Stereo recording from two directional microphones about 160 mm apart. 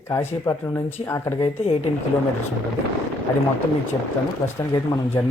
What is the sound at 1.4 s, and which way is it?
Speech, 35° left (ahead or behind).